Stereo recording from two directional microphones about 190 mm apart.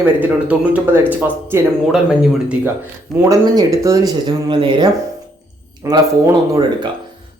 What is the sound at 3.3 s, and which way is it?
Speech, 15° right (ahead or behind).